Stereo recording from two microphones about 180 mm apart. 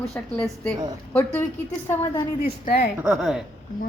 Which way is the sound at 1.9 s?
20° left (ahead or behind).